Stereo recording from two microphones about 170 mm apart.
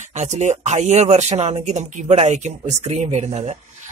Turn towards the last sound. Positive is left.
turn(degrees=-40)  # may be behind; listen again after turning